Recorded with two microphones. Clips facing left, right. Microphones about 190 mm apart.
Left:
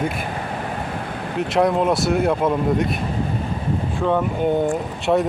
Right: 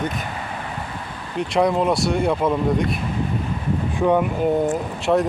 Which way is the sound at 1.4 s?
Centre (ahead or behind).